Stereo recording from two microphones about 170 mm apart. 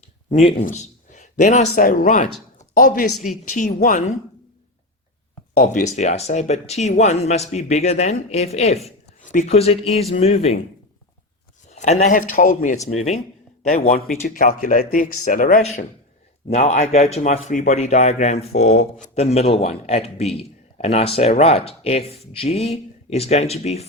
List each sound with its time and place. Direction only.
0.3 s speech: 45° left (ahead or behind)
1.6 s speech: 60° left (ahead or behind)
2.6 s a sound: 50° left (ahead or behind)
3.2 s speech: 50° left (ahead or behind)
5.5 s speech: 50° left (ahead or behind)
11.7 s speech: 40° left (ahead or behind)
13.9 s speech: 55° left (ahead or behind)
16.5 s speech: 40° left (ahead or behind)